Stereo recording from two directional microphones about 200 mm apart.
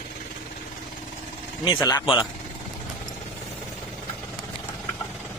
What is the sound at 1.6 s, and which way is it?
Speech, 20° left (ahead or behind).